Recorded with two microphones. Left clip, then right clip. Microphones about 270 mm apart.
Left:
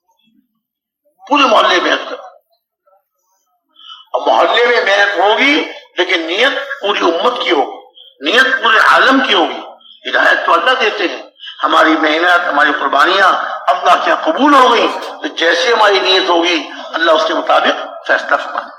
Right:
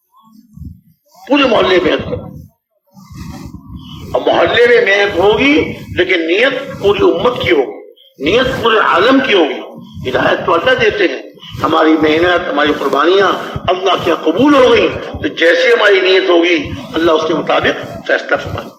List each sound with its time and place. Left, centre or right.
1.2 s a man's voice: left
4.1 s a man's voice: left